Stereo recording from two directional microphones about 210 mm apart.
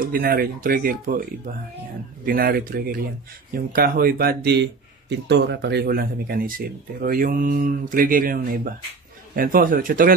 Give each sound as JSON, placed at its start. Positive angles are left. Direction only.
{"t": 0.0, "sound": "speech", "side_deg": -45}
{"t": 2.2, "sound": "a man's voice", "side_deg": -45}